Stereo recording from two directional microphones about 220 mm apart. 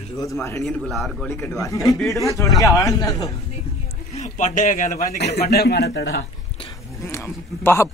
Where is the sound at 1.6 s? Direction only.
15° left (ahead or behind).